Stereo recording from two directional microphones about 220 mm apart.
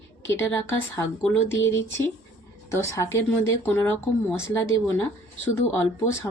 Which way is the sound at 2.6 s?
15° left (ahead or behind).